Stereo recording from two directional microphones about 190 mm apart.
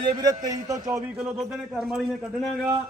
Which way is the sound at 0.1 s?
20° right (ahead or behind).